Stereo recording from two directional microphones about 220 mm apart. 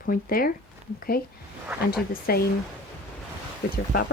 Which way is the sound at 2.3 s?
40° left (ahead or behind).